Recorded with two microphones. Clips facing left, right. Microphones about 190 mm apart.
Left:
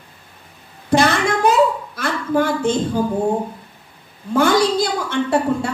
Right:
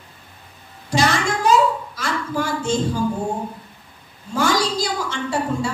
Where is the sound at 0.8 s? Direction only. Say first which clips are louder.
Left 4 dB; 55° left (ahead or behind).